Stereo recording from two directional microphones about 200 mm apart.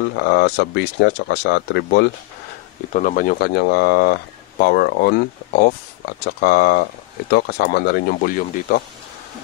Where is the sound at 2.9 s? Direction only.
45° left (ahead or behind).